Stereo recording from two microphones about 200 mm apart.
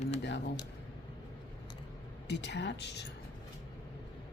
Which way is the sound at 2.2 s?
60° left (ahead or behind).